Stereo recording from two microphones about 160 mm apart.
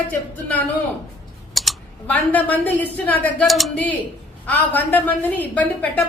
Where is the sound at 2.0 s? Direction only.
10° left (ahead or behind).